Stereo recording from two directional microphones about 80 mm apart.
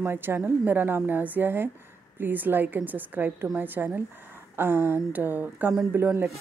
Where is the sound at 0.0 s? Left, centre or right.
Right.